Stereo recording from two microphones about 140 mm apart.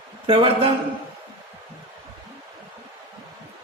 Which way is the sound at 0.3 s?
40° right (ahead or behind).